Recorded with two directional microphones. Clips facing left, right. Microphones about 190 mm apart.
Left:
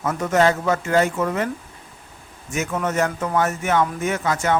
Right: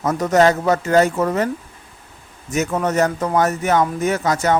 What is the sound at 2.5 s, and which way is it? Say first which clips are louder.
Speech: right 4 dB; 40° right (ahead or behind).